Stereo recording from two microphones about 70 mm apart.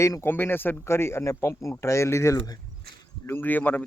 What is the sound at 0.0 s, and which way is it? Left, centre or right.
Speech, left.